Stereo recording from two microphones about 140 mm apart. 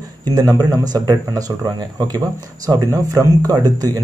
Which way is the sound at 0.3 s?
25° right (ahead or behind).